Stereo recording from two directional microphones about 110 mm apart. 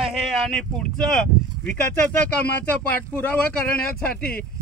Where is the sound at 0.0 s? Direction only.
5° left (ahead or behind).